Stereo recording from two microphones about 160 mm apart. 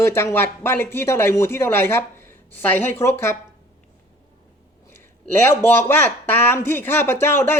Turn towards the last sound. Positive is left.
turn(degrees=15)  # may be behind; listen again after turning